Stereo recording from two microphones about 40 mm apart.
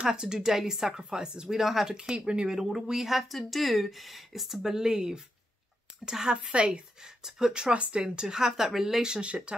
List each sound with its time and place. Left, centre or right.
0.0 s speech: centre
2.0 s speech: right
2.5 s speech: centre; by 6.8 s right
7.2 s speech: centre